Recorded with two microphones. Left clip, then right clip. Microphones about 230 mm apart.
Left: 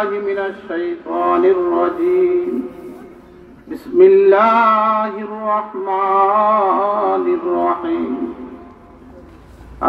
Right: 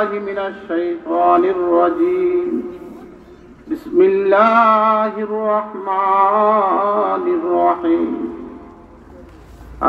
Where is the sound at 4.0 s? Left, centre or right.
Right.